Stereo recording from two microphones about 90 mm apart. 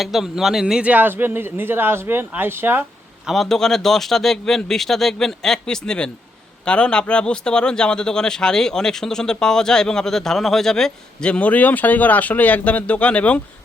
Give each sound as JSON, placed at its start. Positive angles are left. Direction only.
{"t": 0.0, "sound": "speech", "side_deg": -5}
{"t": 3.2, "sound": "speech", "side_deg": 0}